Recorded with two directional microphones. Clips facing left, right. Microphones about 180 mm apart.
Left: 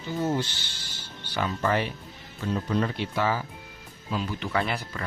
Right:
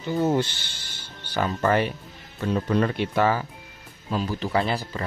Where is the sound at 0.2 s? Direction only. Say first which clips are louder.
Right 5 dB; 60° right (ahead or behind).